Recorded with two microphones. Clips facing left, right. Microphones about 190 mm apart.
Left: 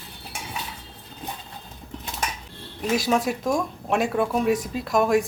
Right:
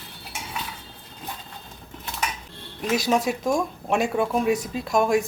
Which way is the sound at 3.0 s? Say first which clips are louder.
Right 1 dB; centre (ahead or behind).